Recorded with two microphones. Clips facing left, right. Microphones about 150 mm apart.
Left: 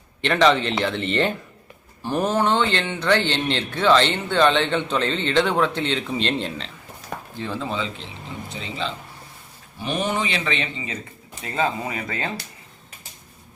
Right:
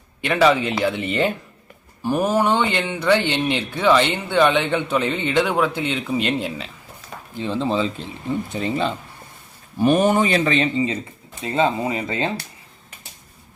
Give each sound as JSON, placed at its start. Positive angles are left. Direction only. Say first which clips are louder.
{"t": 0.2, "sound": "speech", "louder": "right 1 dB", "side_deg": -10}
{"t": 7.3, "sound": "speech", "louder": "right 6 dB", "side_deg": -20}
{"t": 8.6, "sound": "speech", "louder": "right 5 dB", "side_deg": -55}